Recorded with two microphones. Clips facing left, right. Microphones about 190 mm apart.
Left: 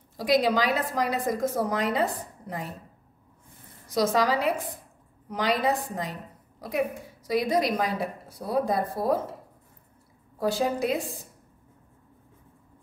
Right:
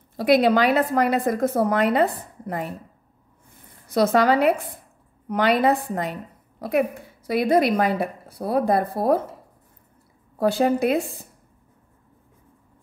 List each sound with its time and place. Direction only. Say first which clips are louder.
0.2 s a woman's voice: right 6 dB; 60° right (ahead or behind)
3.9 s a woman's voice: right 5 dB; 60° right (ahead or behind)
10.4 s a woman's voice: right 6 dB; 60° right (ahead or behind)